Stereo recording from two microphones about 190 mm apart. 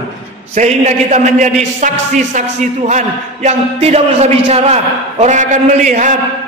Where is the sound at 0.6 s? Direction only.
40° right (ahead or behind).